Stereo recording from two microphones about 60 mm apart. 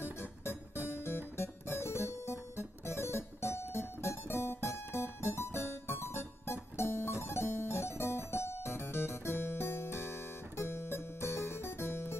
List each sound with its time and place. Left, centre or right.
0.0 s music: left